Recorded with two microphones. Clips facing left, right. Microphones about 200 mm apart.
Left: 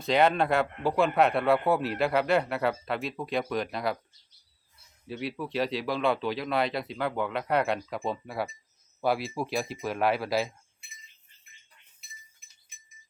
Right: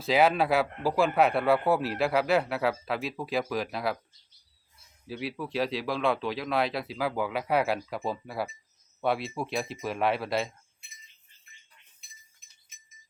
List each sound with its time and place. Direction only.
0.0 s a man's voice: 5° right (ahead or behind)
5.0 s a man's voice: centre (ahead or behind)